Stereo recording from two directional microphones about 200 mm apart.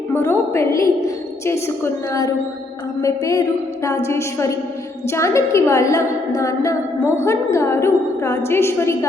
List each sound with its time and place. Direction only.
0.1 s a woman's voice: 10° left (ahead or behind)